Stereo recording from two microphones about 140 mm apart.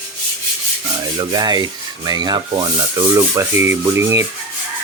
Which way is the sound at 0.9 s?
30° right (ahead or behind).